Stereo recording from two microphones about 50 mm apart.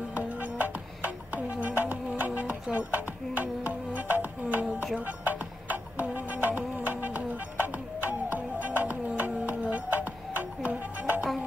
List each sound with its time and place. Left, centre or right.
0.1 s music: right